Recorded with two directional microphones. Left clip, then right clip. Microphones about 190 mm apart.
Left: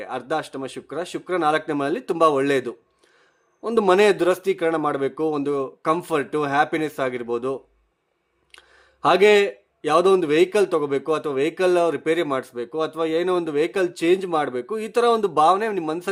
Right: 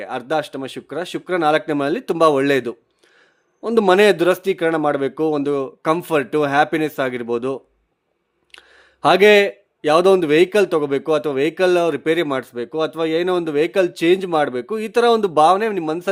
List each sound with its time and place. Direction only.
0.0 s speech: 25° right (ahead or behind)